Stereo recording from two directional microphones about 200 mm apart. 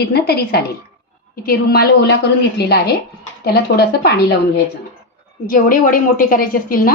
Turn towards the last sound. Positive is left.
turn(degrees=45)  # may be behind; listen again after turning